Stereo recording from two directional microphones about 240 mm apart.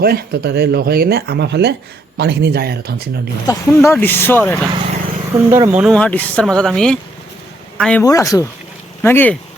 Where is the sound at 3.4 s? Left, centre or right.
Centre.